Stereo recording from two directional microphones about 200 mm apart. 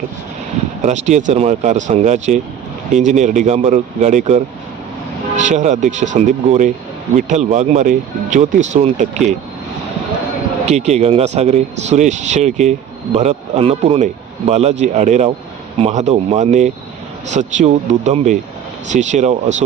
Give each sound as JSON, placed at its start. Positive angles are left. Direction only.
{"t": 0.8, "sound": "speech", "side_deg": -35}
{"t": 5.4, "sound": "speech", "side_deg": -35}
{"t": 10.7, "sound": "speech", "side_deg": -35}